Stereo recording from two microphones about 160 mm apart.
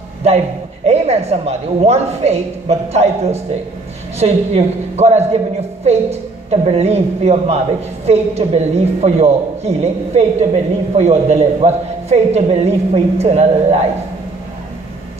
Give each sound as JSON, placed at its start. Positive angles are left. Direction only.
{"t": 0.8, "sound": "a man's voice", "side_deg": -40}